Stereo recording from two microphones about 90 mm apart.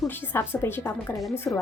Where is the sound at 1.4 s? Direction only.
10° left (ahead or behind).